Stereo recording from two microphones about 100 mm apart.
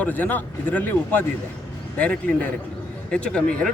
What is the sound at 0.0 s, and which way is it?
Speech, 15° left (ahead or behind).